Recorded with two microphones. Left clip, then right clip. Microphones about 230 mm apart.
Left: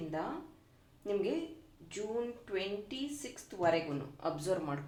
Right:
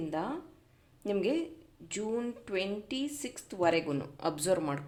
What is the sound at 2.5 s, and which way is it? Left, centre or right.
Speech, right.